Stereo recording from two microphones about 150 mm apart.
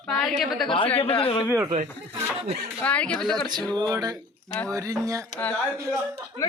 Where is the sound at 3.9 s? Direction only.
25° right (ahead or behind).